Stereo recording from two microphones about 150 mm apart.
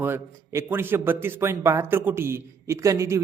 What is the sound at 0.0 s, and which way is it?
A man's voice, 15° right (ahead or behind).